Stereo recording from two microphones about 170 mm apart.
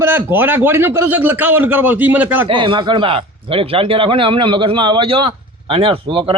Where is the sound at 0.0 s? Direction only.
10° right (ahead or behind).